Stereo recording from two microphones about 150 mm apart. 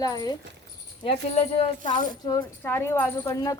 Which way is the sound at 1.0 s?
40° left (ahead or behind).